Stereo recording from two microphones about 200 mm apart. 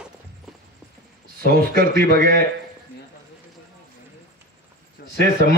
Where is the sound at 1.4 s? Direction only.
50° right (ahead or behind).